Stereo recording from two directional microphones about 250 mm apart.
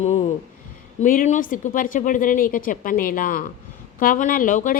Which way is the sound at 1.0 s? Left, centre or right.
Left.